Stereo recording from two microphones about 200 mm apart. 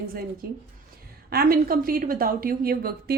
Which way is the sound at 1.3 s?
50° right (ahead or behind).